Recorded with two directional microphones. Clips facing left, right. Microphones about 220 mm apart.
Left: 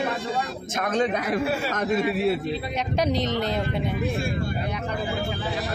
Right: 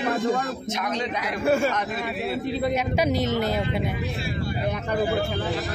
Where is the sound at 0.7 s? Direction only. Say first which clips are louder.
Left 4 dB; 50° left (ahead or behind).